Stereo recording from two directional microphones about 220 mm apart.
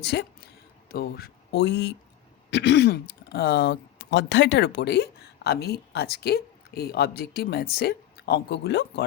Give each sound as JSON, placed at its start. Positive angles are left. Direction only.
{"t": 0.0, "sound": "speech", "side_deg": 50}